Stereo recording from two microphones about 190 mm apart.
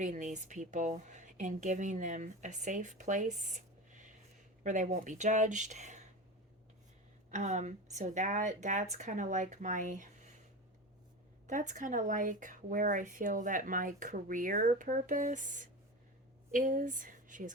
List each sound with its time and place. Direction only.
0.0 s speech: 40° right (ahead or behind)
3.0 s a sound: 40° right (ahead or behind)
4.6 s speech: 40° right (ahead or behind)
7.3 s speech: 40° right (ahead or behind)
11.4 s speech: 40° right (ahead or behind)